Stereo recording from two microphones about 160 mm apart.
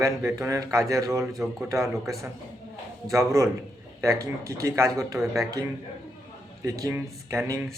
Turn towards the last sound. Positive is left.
turn(degrees=-20)  # may be behind; listen again after turning